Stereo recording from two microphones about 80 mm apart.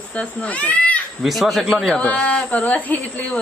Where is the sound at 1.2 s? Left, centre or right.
Centre.